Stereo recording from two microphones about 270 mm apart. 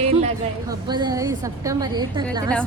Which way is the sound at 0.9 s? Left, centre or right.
Centre.